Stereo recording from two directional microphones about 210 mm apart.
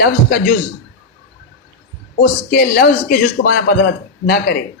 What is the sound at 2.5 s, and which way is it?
Speech, 45° left (ahead or behind).